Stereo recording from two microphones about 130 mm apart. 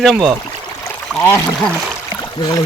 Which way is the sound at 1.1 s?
15° left (ahead or behind).